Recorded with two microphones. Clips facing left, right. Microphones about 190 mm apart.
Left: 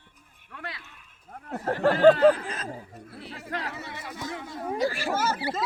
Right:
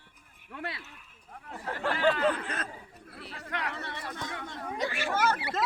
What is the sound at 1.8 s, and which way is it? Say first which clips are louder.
Speech: left 10 dB; 45° left (ahead or behind).